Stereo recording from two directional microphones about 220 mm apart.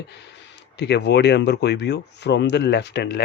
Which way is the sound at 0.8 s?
50° left (ahead or behind).